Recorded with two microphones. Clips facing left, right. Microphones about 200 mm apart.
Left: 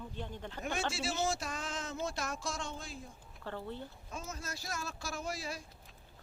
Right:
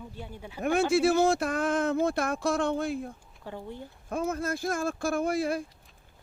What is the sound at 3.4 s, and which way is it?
Speech, 15° right (ahead or behind).